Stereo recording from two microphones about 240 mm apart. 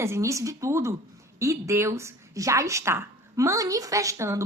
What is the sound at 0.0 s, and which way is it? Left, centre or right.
A woman's voice, centre.